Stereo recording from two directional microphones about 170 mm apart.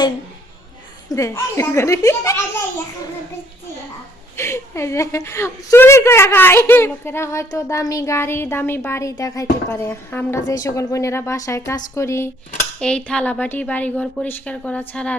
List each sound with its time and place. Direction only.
1.1 s a woman's voice: 15° left (ahead or behind)
4.4 s a woman's voice: 15° left (ahead or behind)
12.8 s a woman's voice: 5° left (ahead or behind)